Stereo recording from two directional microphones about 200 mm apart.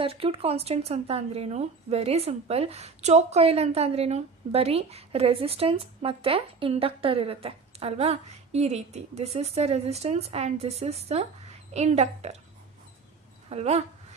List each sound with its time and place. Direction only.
0.0 s speech: 30° right (ahead or behind)
13.5 s speech: 30° right (ahead or behind)